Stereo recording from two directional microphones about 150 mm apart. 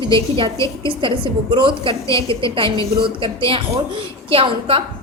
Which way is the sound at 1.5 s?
35° right (ahead or behind).